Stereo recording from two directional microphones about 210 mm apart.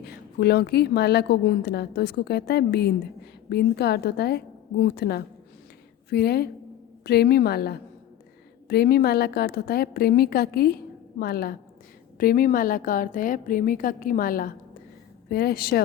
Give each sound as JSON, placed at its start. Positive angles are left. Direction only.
{"t": 0.0, "sound": "a woman's voice", "side_deg": 50}